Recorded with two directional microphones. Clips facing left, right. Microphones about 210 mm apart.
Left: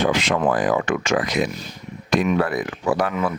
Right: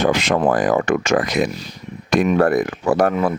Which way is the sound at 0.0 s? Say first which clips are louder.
Right 3 dB; 45° right (ahead or behind).